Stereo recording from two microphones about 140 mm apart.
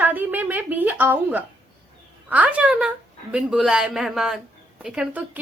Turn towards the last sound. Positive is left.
turn(degrees=-10)  # may be behind; listen again after turning